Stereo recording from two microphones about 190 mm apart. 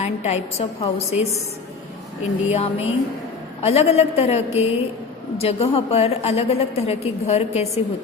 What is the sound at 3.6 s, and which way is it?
A woman's voice, 35° left (ahead or behind).